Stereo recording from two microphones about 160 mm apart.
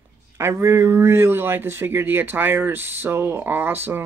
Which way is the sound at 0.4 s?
15° right (ahead or behind).